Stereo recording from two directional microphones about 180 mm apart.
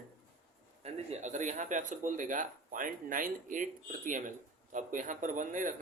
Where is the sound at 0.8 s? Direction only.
40° right (ahead or behind).